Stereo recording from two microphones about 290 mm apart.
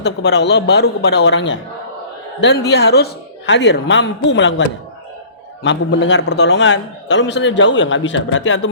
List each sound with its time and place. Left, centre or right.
0.0 s a man's voice: left